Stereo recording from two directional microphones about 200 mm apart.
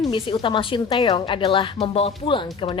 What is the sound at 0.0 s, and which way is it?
A woman's voice, 25° left (ahead or behind).